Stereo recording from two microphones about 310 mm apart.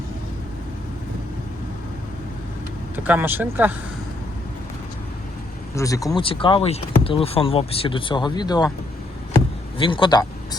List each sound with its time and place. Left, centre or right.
2.9 s speech: centre
5.7 s speech: centre
9.7 s speech: centre